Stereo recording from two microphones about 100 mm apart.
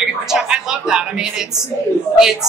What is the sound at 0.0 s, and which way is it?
A woman's voice, 5° right (ahead or behind).